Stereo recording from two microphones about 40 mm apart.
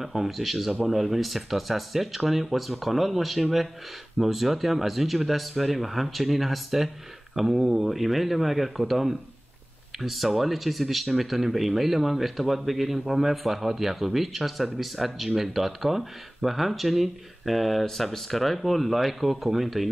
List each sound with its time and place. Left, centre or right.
0.0 s speech: centre